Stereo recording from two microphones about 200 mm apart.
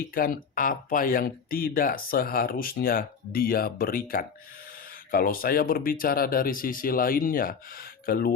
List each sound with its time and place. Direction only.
0.0 s speech: 45° left (ahead or behind)